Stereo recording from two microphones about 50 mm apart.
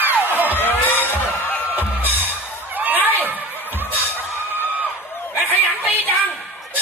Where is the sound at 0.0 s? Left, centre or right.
Right.